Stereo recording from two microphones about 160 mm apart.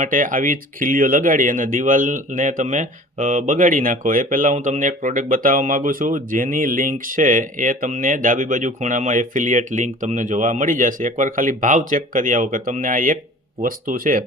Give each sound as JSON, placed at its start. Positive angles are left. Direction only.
{"t": 0.0, "sound": "speech", "side_deg": -55}